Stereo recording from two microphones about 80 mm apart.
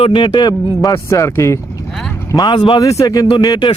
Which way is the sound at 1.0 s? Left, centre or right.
Left.